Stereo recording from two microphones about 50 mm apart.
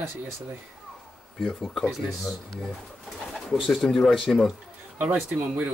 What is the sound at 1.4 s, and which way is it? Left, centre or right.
Speech, centre.